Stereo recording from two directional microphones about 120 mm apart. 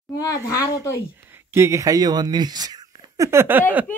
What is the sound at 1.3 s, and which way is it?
Speech, 20° right (ahead or behind).